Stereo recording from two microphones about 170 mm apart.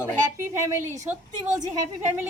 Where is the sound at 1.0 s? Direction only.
15° right (ahead or behind).